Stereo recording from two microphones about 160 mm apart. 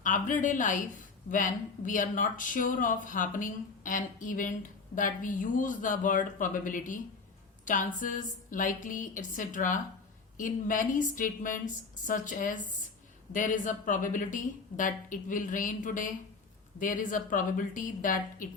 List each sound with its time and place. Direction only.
0.0 s a woman's voice: 55° left (ahead or behind)